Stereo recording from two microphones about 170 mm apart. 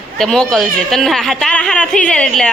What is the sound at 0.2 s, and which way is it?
Speech, centre (ahead or behind).